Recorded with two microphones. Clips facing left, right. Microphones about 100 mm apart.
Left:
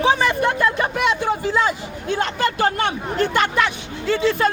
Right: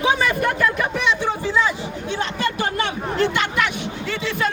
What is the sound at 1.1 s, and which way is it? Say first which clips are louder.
Speech: left 1 dB; 45° left (ahead or behind).